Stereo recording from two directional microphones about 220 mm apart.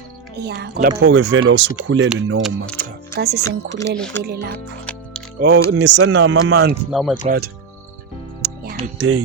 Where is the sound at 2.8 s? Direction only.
50° right (ahead or behind).